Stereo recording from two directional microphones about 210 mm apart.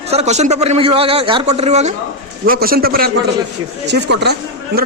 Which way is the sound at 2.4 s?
45° right (ahead or behind).